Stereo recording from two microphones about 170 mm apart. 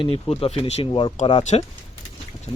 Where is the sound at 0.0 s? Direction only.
35° left (ahead or behind).